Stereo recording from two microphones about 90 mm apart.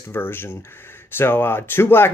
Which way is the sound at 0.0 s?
25° left (ahead or behind).